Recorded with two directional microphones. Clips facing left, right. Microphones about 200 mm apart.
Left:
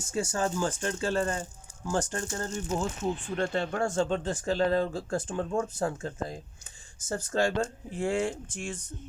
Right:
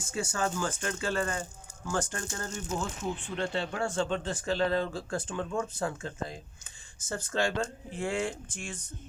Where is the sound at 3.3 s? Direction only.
45° left (ahead or behind).